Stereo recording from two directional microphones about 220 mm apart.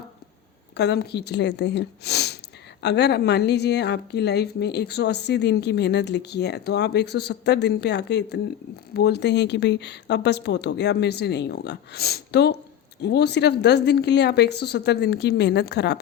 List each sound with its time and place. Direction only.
0.8 s a woman's voice: 50° left (ahead or behind)